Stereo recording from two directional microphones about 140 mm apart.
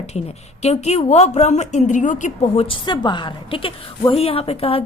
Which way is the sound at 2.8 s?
35° left (ahead or behind).